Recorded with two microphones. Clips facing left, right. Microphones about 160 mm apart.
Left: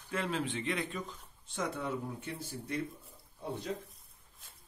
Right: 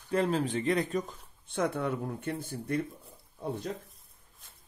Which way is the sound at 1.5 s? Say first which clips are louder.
Right 6 dB; 60° right (ahead or behind).